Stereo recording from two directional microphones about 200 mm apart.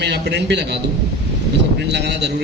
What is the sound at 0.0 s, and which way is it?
Speech, 60° right (ahead or behind).